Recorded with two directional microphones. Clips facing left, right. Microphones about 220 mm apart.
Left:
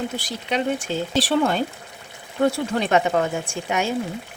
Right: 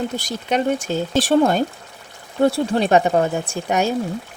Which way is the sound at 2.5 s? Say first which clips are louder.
Right 5 dB; 35° right (ahead or behind).